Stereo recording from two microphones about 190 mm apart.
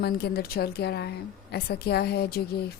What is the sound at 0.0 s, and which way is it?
A woman's voice, 55° left (ahead or behind).